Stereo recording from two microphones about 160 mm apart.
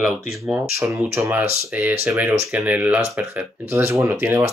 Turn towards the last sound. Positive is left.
turn(degrees=-15)  # may be behind; listen again after turning